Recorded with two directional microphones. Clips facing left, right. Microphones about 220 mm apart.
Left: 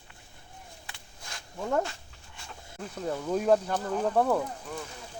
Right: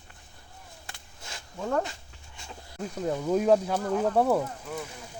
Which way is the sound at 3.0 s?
10° right (ahead or behind).